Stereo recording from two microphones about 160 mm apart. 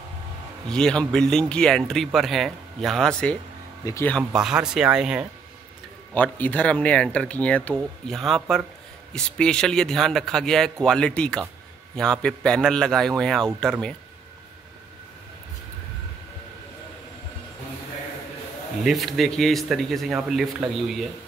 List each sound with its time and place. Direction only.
0.7 s speech: 5° left (ahead or behind)
3.8 s speech: 20° left (ahead or behind)
4.2 s speech: 5° right (ahead or behind)
6.1 s speech: 10° left (ahead or behind)
18.9 s speech: centre (ahead or behind)